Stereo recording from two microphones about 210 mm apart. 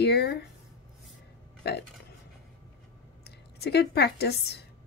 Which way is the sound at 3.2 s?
50° left (ahead or behind).